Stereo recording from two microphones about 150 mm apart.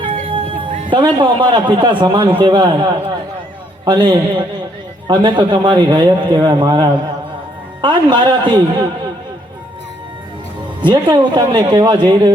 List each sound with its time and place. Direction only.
0.3 s music: 35° right (ahead or behind)
0.9 s a man's voice: 30° right (ahead or behind)
3.8 s a man's voice: 30° right (ahead or behind)
10.8 s speech: 30° right (ahead or behind)